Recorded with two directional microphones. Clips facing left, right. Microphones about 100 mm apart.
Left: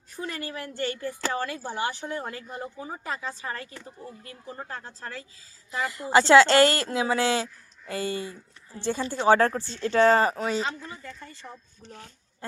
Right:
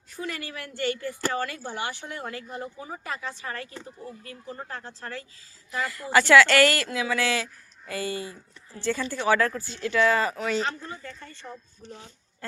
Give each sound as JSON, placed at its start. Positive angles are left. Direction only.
{"t": 0.2, "sound": "a woman's voice", "side_deg": 30}
{"t": 4.7, "sound": "speech", "side_deg": 5}
{"t": 5.7, "sound": "speech", "side_deg": 20}
{"t": 12.4, "sound": "a sound", "side_deg": 20}